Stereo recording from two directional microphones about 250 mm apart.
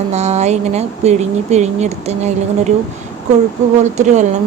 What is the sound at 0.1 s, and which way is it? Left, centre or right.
A woman's voice, right.